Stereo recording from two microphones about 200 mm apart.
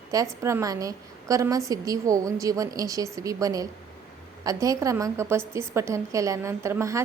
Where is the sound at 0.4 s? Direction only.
15° right (ahead or behind).